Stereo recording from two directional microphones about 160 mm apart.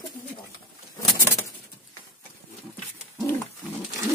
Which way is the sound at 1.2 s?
15° left (ahead or behind).